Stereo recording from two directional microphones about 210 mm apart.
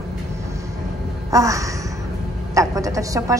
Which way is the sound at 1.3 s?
15° right (ahead or behind).